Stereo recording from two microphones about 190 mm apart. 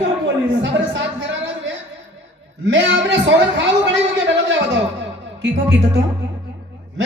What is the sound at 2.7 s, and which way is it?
A man's voice, 75° right (ahead or behind).